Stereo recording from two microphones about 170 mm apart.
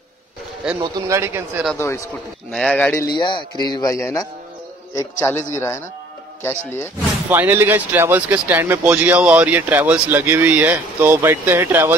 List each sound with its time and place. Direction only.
0.7 s speech: 15° right (ahead or behind)
1.8 s speech: 15° left (ahead or behind)
2.5 s speech: 5° left (ahead or behind)
3.2 s speech: 25° left (ahead or behind)
7.2 s speech: 10° right (ahead or behind)